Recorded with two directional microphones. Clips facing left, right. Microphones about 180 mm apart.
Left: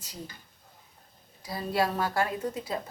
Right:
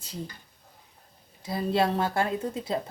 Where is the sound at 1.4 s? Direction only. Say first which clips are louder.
Right 3 dB; 25° right (ahead or behind).